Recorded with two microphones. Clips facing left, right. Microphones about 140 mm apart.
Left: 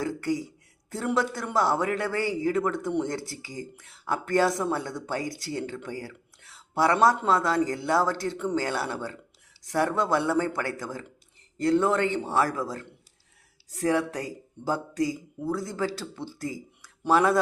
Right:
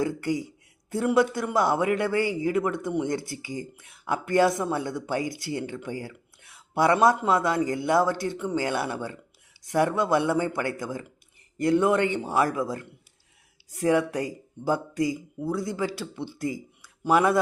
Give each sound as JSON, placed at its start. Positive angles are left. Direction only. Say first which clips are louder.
{"t": 0.0, "sound": "a man's voice", "louder": "right 2 dB", "side_deg": -15}